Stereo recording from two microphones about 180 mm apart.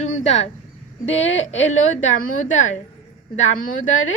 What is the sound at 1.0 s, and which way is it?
Speech, 90° left.